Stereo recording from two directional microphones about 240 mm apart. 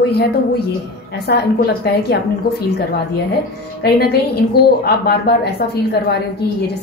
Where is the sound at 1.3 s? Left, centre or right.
Left.